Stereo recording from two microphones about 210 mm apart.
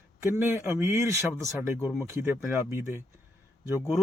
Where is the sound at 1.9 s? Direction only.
10° right (ahead or behind).